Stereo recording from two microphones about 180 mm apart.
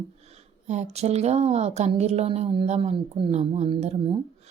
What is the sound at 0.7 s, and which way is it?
A woman's voice, 40° right (ahead or behind).